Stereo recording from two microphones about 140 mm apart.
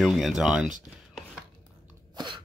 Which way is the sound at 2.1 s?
35° right (ahead or behind).